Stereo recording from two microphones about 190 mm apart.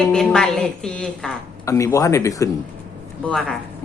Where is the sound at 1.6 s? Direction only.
15° left (ahead or behind).